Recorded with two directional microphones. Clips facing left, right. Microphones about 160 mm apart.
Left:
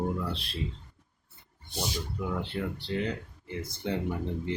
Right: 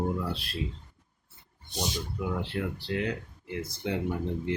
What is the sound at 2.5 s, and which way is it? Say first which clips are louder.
Speech: right 1 dB; 5° right (ahead or behind).